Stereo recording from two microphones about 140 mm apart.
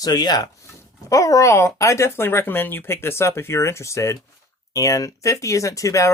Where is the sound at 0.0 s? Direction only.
30° left (ahead or behind).